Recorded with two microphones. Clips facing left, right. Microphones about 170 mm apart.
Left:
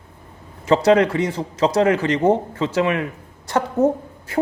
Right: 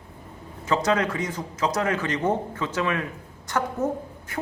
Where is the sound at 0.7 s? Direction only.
30° left (ahead or behind).